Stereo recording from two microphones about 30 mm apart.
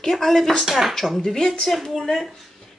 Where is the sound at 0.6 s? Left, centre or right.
Centre.